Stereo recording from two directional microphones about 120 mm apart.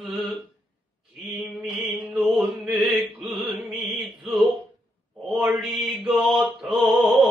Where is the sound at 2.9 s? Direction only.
15° right (ahead or behind).